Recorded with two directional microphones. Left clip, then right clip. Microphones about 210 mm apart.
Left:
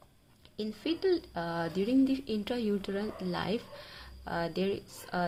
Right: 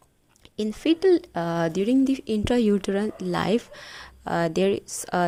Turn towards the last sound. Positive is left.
turn(degrees=-45)  # may be behind; listen again after turning